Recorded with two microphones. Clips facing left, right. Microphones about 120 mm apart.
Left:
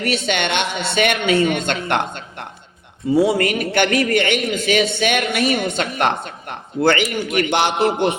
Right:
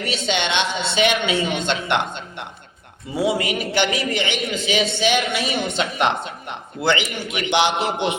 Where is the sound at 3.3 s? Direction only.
55° left (ahead or behind).